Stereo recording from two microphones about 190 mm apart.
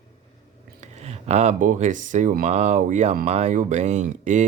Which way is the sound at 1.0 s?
35° right (ahead or behind).